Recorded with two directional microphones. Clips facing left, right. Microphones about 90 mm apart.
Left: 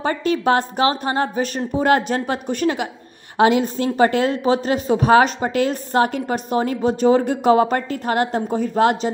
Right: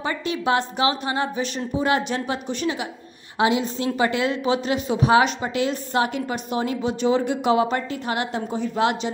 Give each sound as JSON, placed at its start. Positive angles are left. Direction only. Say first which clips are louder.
{"t": 0.0, "sound": "a woman's voice", "louder": "left 5 dB", "side_deg": 45}